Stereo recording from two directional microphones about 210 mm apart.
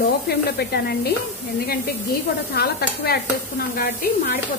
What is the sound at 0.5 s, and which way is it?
Speech, 50° left (ahead or behind).